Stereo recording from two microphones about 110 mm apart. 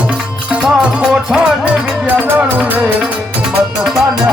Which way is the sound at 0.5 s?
10° right (ahead or behind).